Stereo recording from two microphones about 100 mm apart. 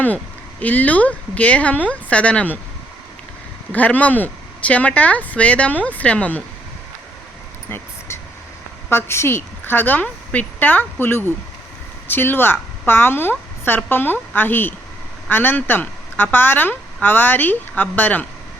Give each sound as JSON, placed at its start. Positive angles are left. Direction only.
{"t": 0.6, "sound": "speech", "side_deg": 15}
{"t": 3.7, "sound": "speech", "side_deg": 15}
{"t": 8.9, "sound": "a woman's voice", "side_deg": 25}